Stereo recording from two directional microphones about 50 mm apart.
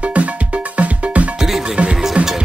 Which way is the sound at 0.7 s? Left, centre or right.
Right.